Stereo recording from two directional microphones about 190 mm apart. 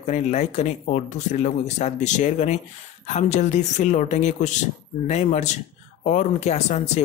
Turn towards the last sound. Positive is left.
turn(degrees=35)  # may be behind; listen again after turning